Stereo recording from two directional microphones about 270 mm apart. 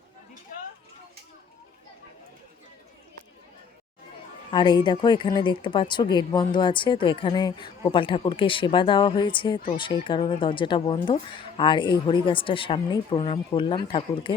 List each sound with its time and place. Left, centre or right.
4.5 s speech: centre